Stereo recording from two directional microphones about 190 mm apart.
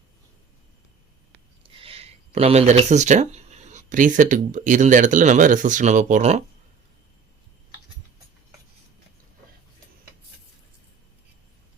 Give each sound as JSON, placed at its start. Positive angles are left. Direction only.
{"t": 1.8, "sound": "speech", "side_deg": -30}